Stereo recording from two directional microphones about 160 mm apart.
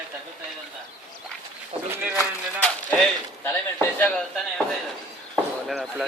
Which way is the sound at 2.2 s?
10° left (ahead or behind).